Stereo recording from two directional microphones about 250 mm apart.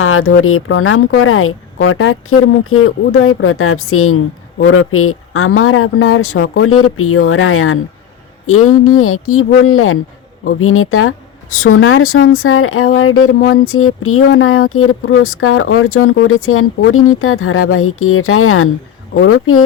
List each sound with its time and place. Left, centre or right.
0.0 s speech: left